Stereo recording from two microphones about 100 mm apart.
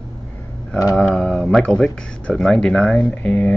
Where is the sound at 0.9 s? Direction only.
5° left (ahead or behind).